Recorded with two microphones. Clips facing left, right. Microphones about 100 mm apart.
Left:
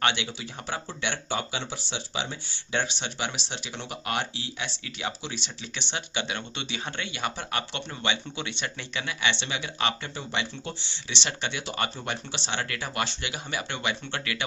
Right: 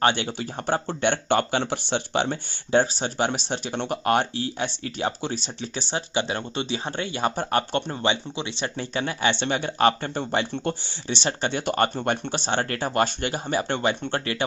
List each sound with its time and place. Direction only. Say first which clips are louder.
0.0 s speech: right 5 dB; 45° right (ahead or behind)
2.8 s speech: right 7 dB; 45° right (ahead or behind)